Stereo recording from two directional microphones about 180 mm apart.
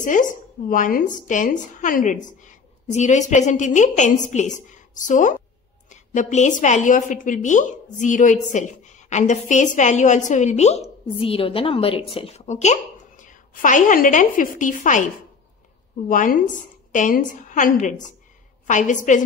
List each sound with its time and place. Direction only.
0.0 s a woman's voice: 45° left (ahead or behind)
16.1 s a woman's voice: 50° left (ahead or behind)